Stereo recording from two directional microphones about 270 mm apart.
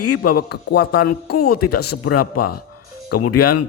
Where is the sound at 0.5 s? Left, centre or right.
Left.